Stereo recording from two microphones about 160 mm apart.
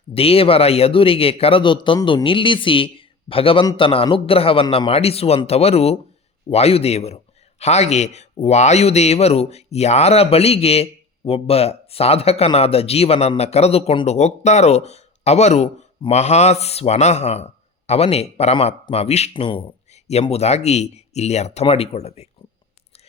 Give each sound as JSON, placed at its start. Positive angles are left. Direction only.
{"t": 0.1, "sound": "speech", "side_deg": 35}